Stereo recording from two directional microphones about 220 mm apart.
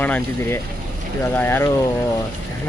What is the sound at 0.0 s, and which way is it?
Speech, 10° left (ahead or behind).